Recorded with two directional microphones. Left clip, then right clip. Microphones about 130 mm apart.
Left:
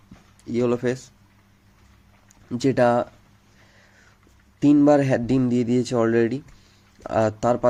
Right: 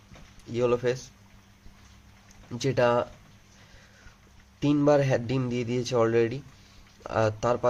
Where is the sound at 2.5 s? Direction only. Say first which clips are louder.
Left 5 dB; 50° left (ahead or behind).